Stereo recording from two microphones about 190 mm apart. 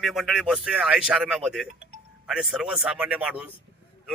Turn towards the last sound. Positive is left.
turn(degrees=-5)  # may be behind; listen again after turning